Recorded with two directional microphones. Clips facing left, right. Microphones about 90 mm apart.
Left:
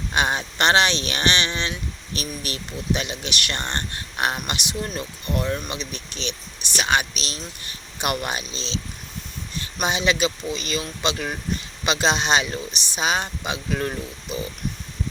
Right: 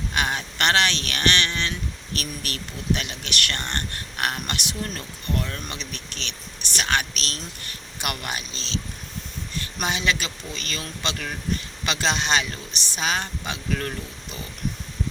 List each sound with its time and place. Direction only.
0.1 s a man's voice: 20° left (ahead or behind)
9.8 s a man's voice: 20° left (ahead or behind)